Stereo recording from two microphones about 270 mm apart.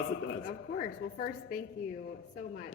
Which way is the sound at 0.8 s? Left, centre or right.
Left.